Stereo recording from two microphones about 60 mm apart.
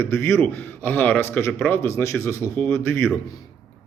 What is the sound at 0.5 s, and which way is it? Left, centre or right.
Mantra, left.